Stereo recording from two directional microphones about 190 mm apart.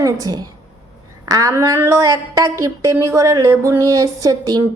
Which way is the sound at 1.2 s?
15° right (ahead or behind).